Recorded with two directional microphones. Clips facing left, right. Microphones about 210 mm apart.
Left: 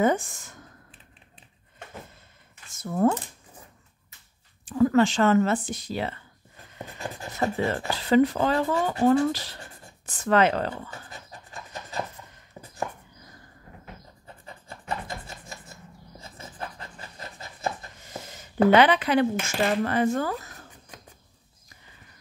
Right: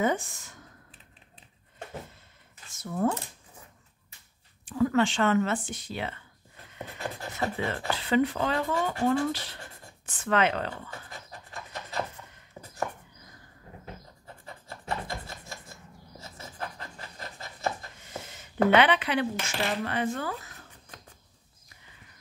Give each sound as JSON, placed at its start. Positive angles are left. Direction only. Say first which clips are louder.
{"t": 0.0, "sound": "speech", "louder": "left 4 dB", "side_deg": 50}
{"t": 2.8, "sound": "speech", "louder": "left 5 dB", "side_deg": 45}
{"t": 4.6, "sound": "speech", "louder": "left 4 dB", "side_deg": 40}
{"t": 7.3, "sound": "speech", "louder": "left 6 dB", "side_deg": 40}
{"t": 18.0, "sound": "speech", "louder": "left 2 dB", "side_deg": 40}